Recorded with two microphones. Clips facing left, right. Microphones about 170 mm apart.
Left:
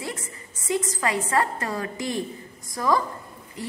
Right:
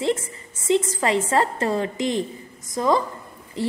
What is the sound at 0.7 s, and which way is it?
A woman's voice, 25° right (ahead or behind).